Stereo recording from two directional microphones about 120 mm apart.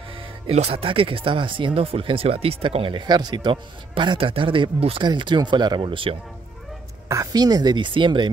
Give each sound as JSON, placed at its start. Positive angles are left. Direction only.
{"t": 0.5, "sound": "speech", "side_deg": -60}
{"t": 7.1, "sound": "speech", "side_deg": -30}